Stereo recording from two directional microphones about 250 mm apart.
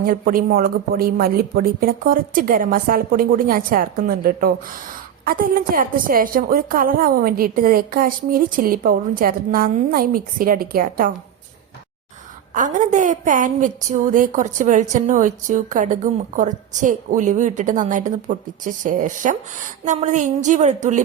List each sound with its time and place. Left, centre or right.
0.0 s a woman's voice: right
12.5 s a woman's voice: right